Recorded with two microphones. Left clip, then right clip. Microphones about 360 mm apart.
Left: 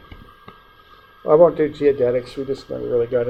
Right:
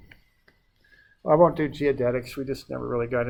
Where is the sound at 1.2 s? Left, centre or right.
Right.